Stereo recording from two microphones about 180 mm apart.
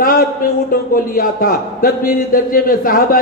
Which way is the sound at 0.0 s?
55° left (ahead or behind).